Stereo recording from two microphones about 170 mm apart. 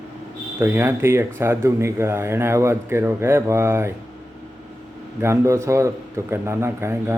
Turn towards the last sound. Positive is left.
turn(degrees=-15)  # may be behind; listen again after turning